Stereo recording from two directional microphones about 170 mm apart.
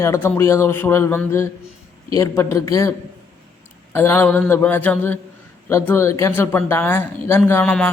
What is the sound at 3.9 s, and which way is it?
A man's voice, 15° left (ahead or behind).